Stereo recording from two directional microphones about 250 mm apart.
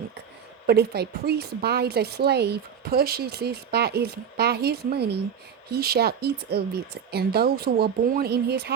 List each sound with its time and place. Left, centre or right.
0.7 s a woman's voice: right